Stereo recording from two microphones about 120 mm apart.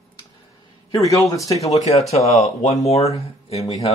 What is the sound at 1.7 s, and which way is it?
Speech, 65° left (ahead or behind).